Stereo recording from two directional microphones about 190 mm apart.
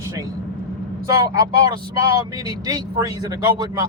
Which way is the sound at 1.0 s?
20° right (ahead or behind).